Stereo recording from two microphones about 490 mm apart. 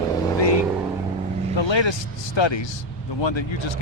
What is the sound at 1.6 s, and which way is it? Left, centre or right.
Speech, left.